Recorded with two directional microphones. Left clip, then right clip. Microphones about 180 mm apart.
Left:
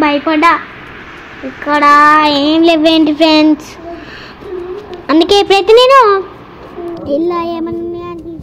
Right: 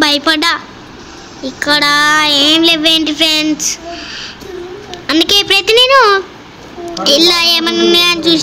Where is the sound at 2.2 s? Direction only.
20° left (ahead or behind).